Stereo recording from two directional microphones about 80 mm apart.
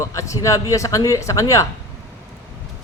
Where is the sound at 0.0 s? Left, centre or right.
Left.